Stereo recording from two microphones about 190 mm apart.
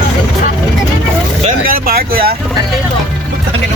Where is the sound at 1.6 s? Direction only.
50° right (ahead or behind).